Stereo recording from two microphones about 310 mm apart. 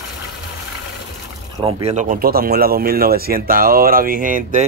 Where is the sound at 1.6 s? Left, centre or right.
Centre.